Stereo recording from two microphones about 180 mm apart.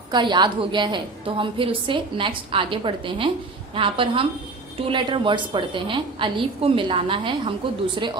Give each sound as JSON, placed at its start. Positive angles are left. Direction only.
{"t": 0.1, "sound": "a woman's voice", "side_deg": -25}